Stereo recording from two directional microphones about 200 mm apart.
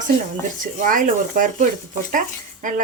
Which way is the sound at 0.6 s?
40° right (ahead or behind).